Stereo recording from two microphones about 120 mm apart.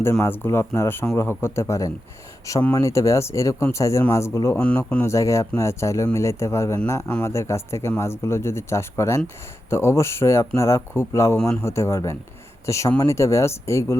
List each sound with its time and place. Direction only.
0.1 s speech: 20° left (ahead or behind)
4.6 s a man's voice: 10° left (ahead or behind)
5.0 s speech: 25° left (ahead or behind)